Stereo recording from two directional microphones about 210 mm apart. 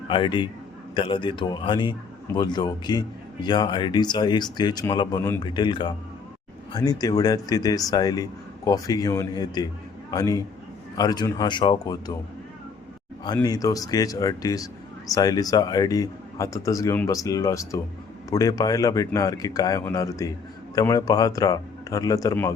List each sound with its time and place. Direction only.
0.1 s speech: 25° left (ahead or behind)
13.2 s speech: 20° left (ahead or behind)